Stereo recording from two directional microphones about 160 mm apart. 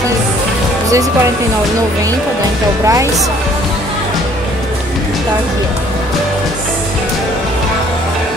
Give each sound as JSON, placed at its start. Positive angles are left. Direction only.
{"t": 2.8, "sound": "speech", "side_deg": -20}